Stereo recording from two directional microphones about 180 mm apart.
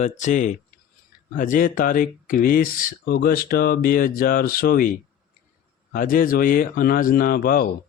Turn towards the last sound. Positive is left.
turn(degrees=55)  # may be behind; listen again after turning